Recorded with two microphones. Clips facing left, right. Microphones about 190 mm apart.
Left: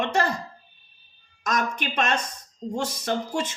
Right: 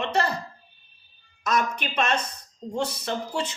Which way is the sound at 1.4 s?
45° left (ahead or behind).